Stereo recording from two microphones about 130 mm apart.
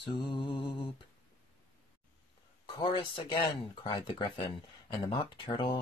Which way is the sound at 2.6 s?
40° left (ahead or behind).